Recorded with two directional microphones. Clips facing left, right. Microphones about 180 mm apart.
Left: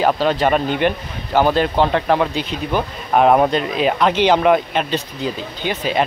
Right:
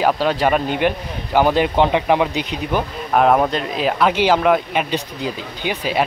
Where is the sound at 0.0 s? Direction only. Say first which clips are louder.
Left 1 dB; 5° right (ahead or behind).